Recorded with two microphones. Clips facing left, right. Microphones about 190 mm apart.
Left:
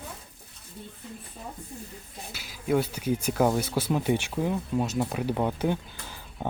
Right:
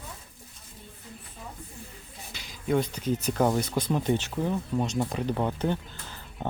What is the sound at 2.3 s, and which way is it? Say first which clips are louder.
Speech: left 1 dB; 5° left (ahead or behind).